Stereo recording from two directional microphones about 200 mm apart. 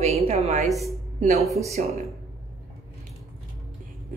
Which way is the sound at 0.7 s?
Centre (ahead or behind).